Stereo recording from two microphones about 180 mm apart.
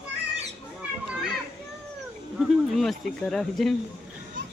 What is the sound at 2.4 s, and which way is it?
Speech, centre (ahead or behind).